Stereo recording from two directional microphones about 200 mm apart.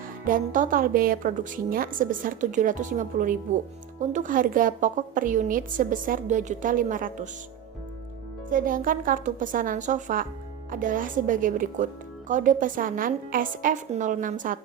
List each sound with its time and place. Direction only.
0.3 s a woman's voice: 40° right (ahead or behind)
8.4 s a woman's voice: 45° right (ahead or behind)